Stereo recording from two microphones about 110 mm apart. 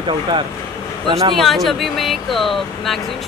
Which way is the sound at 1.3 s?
Centre (ahead or behind).